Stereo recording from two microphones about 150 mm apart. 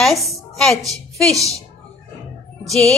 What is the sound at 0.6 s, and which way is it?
Speech, centre (ahead or behind).